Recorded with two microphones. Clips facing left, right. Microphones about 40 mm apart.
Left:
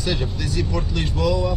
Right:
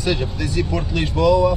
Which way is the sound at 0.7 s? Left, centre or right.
Centre.